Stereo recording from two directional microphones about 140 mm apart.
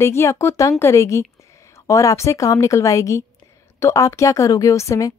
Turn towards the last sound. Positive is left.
turn(degrees=20)  # may be behind; listen again after turning